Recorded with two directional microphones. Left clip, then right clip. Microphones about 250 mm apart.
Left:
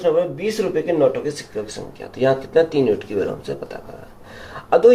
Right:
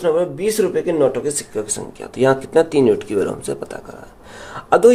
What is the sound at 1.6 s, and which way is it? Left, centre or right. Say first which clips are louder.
Speech: right 3 dB; right.